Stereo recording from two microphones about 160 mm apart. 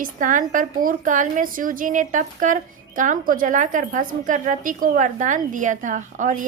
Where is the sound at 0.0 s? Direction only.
55° right (ahead or behind).